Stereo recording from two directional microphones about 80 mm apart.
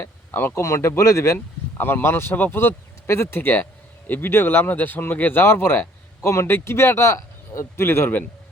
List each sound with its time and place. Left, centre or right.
0.0 s speech: left
0.6 s a man's voice: left
1.8 s a man's voice: left